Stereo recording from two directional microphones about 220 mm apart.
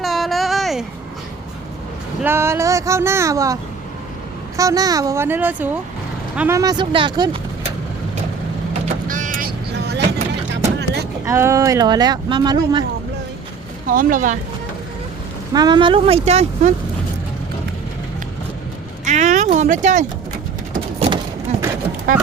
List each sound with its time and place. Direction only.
0.0 s a sound: centre (ahead or behind)
2.2 s speech: 10° right (ahead or behind)
9.0 s vehicle: 35° right (ahead or behind)
10.5 s music: 50° right (ahead or behind)
11.3 s speech: 15° right (ahead or behind)
13.8 s speech: 40° right (ahead or behind)
15.5 s speech: 20° right (ahead or behind)
19.0 s speech: 35° right (ahead or behind)
22.1 s speech: 40° right (ahead or behind)